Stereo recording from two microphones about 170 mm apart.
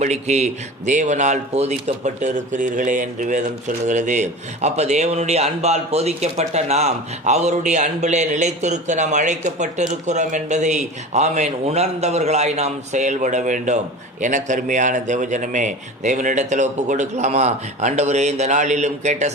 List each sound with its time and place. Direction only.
0.0 s a man's voice: 40° right (ahead or behind)